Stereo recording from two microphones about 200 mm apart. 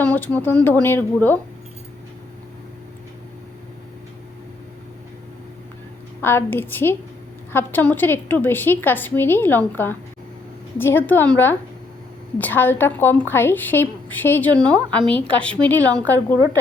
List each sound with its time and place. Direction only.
0.0 s a woman's voice: 5° left (ahead or behind)
6.2 s a woman's voice: 10° left (ahead or behind)